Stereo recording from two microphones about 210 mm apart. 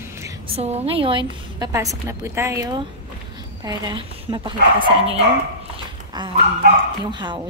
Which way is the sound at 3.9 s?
20° right (ahead or behind).